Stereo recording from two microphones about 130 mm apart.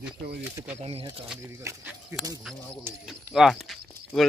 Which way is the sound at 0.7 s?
50° right (ahead or behind).